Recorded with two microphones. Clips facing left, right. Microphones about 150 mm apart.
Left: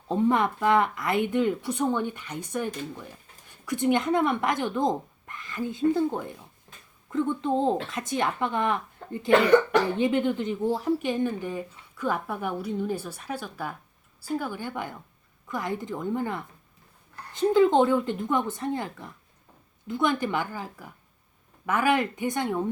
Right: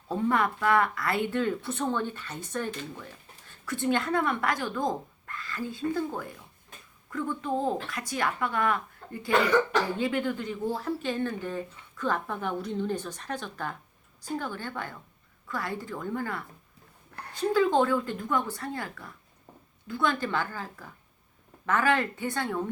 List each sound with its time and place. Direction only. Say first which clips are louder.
0.1 s speech: left 3 dB; 20° left (ahead or behind)